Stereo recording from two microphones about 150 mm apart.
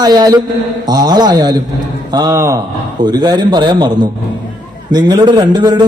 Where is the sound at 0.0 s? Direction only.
25° right (ahead or behind).